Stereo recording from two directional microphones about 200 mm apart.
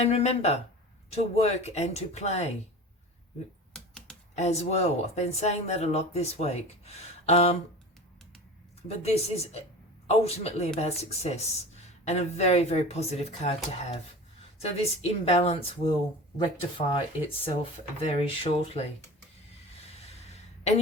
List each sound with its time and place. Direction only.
0.0 s speech: 30° left (ahead or behind)
3.7 s typing: 5° left (ahead or behind)
4.4 s speech: 35° left (ahead or behind)
9.0 s speech: 30° left (ahead or behind)
17.4 s speech: 30° left (ahead or behind)
19.7 s a sound: 30° left (ahead or behind)